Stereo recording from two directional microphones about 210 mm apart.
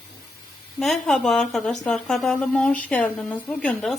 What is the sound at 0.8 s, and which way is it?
A woman's voice, centre (ahead or behind).